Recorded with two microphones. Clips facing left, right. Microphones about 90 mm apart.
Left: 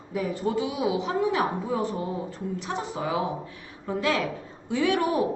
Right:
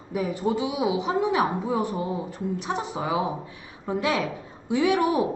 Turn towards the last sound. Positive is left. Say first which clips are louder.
# right 2 dB
turn(degrees=-15)  # may be behind; listen again after turning